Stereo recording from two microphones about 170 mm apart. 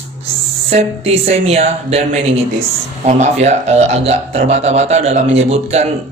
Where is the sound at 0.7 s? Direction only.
35° right (ahead or behind).